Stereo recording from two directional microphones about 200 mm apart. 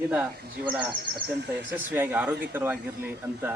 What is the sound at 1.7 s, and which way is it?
Speech, 10° right (ahead or behind).